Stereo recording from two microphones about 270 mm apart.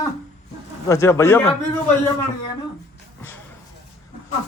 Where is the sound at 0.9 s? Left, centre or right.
Centre.